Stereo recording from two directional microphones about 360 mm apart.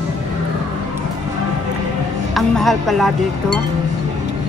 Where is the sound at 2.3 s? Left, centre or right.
Centre.